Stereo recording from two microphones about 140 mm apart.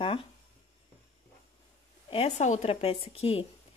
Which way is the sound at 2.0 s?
45° left (ahead or behind).